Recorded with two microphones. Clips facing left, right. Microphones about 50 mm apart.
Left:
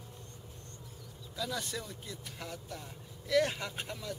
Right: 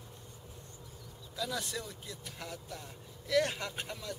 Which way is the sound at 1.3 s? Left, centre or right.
Centre.